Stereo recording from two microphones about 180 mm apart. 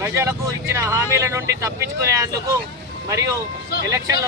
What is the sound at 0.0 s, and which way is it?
Speech, 15° right (ahead or behind).